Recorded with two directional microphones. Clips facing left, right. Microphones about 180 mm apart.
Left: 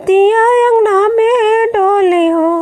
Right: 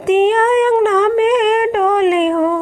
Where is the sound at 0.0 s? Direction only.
50° left (ahead or behind).